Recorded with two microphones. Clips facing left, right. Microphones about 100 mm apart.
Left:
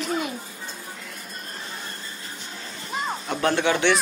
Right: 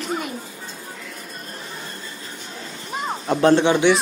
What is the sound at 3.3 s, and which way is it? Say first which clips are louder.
Speech: right 7 dB; 25° right (ahead or behind).